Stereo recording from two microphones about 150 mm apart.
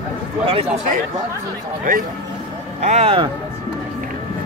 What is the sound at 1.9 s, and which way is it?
Speech, 70° right (ahead or behind).